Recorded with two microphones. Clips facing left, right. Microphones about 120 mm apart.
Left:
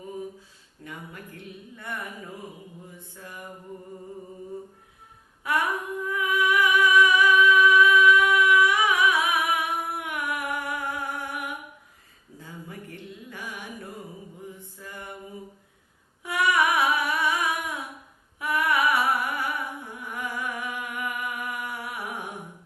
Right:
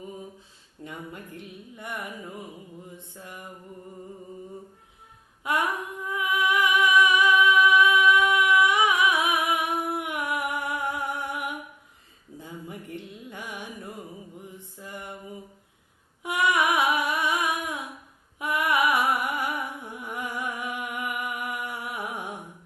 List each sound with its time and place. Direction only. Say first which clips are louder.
0.9 s carnatic music: right 2 dB; 20° right (ahead or behind)
5.4 s a sound: even; 20° right (ahead or behind)
6.1 s music: left 1 dB; 20° right (ahead or behind)
12.4 s mantra: right 2 dB; 20° right (ahead or behind)
16.2 s humming: even; 20° right (ahead or behind)
18.3 s music: even; 20° right (ahead or behind)